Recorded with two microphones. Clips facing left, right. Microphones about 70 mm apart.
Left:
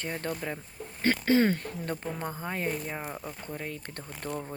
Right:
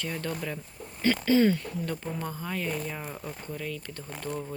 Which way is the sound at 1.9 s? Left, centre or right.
Left.